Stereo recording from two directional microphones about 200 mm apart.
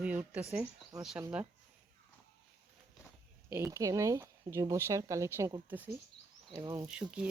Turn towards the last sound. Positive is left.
turn(degrees=-5)  # may be behind; listen again after turning